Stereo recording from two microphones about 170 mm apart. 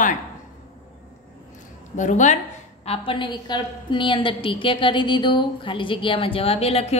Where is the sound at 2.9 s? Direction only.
30° left (ahead or behind).